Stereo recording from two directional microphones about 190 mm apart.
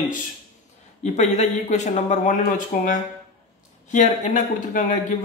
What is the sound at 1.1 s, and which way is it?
Speech, 35° left (ahead or behind).